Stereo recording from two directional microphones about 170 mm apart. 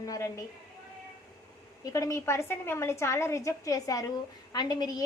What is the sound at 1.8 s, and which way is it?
A woman's voice, 20° left (ahead or behind).